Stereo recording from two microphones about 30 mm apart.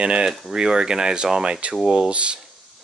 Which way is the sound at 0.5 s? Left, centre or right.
Right.